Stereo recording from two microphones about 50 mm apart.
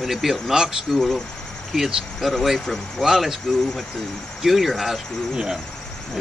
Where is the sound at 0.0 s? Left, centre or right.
Centre.